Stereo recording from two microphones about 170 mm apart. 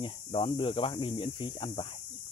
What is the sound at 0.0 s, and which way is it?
Speech, 30° left (ahead or behind).